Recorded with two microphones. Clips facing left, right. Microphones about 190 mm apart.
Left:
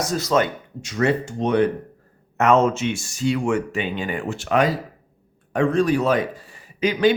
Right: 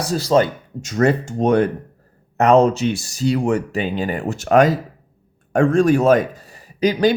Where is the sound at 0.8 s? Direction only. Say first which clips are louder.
Right 4 dB; 45° right (ahead or behind).